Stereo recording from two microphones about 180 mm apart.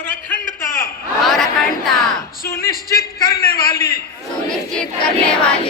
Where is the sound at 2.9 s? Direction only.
20° left (ahead or behind).